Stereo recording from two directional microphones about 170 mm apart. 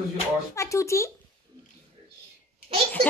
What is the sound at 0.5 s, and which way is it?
Speech, 15° left (ahead or behind).